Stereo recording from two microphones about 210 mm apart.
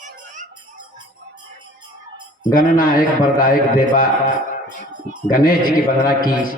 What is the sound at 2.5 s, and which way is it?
A man's voice, 40° left (ahead or behind).